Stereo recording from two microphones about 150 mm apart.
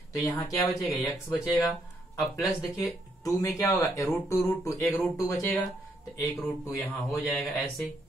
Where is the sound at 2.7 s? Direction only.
20° left (ahead or behind).